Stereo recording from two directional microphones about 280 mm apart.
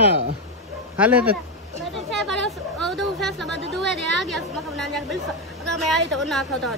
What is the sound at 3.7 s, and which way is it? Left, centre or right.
A woman's voice, centre.